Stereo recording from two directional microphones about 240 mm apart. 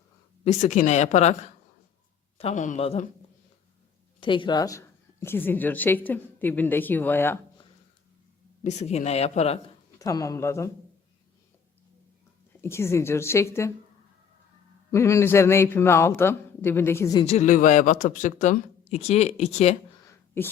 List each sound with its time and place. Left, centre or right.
0.4 s speech: left
2.4 s speech: left
4.2 s speech: left
8.6 s speech: left
10.0 s speech: centre
12.6 s speech: centre
14.9 s speech: centre
17.2 s speech: left
20.1 s a sound: centre